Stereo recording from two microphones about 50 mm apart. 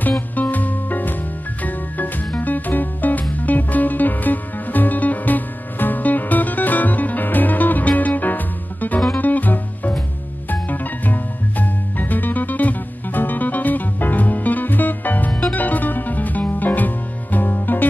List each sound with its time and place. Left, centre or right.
0.4 s music: left